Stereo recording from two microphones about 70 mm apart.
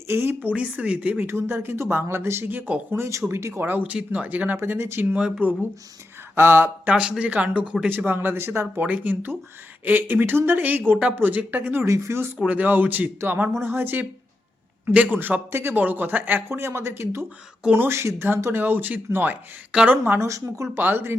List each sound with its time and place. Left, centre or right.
0.1 s speech: right
0.5 s speech: centre
1.2 s speech: right
2.9 s speech: right
5.1 s speech: centre
6.3 s speech: right
6.9 s speech: centre
7.9 s speech: right
8.8 s speech: right
11.8 s speech: right
12.5 s speech: right
15.1 s speech: right
20.1 s speech: right
20.7 s speech: right